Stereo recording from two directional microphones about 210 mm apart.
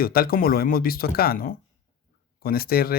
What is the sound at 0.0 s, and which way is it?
Speech, 45° left (ahead or behind).